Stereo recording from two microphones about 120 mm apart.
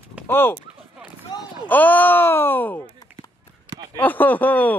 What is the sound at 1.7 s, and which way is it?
A man's voice, 15° left (ahead or behind).